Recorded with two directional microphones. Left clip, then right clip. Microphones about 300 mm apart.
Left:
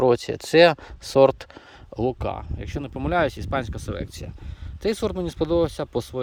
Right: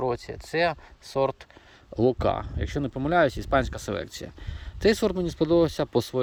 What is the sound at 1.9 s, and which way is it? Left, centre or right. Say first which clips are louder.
Speech: right 3 dB; centre.